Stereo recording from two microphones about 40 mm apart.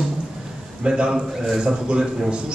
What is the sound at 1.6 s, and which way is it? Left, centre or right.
Speech, right.